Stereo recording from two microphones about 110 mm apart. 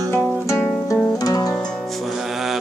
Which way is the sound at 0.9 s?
35° left (ahead or behind).